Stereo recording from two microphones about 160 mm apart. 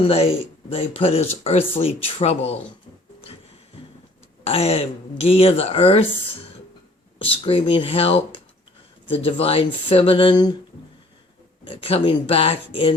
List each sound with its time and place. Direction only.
0.0 s speech: 40° left (ahead or behind)
4.4 s speech: 40° left (ahead or behind)
7.2 s speech: 35° left (ahead or behind)
11.7 s speech: 35° left (ahead or behind)